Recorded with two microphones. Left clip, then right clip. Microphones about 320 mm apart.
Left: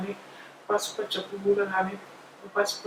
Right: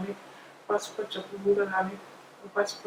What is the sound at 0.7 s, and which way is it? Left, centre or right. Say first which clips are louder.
Speech: left 2 dB; centre.